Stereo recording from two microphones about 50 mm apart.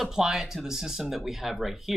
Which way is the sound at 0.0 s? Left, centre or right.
Centre.